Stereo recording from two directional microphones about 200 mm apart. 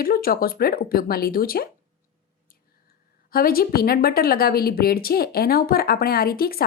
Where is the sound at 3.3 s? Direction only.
50° left (ahead or behind).